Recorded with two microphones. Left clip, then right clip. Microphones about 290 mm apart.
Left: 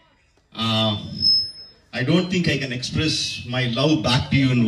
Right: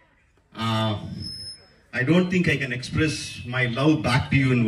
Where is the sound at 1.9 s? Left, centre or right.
Left.